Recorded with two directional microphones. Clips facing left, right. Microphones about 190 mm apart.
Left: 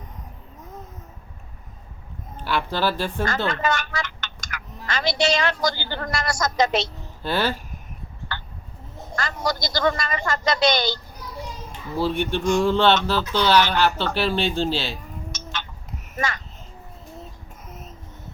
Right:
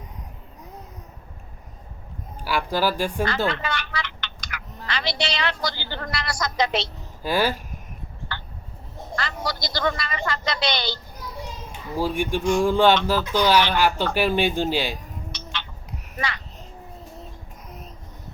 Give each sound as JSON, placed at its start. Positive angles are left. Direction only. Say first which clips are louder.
{"t": 2.4, "sound": "speech", "louder": "right 1 dB", "side_deg": -10}
{"t": 3.2, "sound": "a woman's voice", "louder": "left 1 dB", "side_deg": 45}
{"t": 7.2, "sound": "speech", "louder": "right 1 dB", "side_deg": -10}
{"t": 8.3, "sound": "a sound", "louder": "left 2 dB", "side_deg": 45}
{"t": 9.1, "sound": "a woman's voice", "louder": "left 3 dB", "side_deg": 45}
{"t": 11.9, "sound": "speech", "louder": "left 1 dB", "side_deg": -10}
{"t": 15.3, "sound": "cat", "louder": "left 2 dB", "side_deg": 45}
{"t": 16.1, "sound": "a child's voice", "louder": "left 3 dB", "side_deg": 45}
{"t": 17.7, "sound": "child singing", "louder": "even", "side_deg": 0}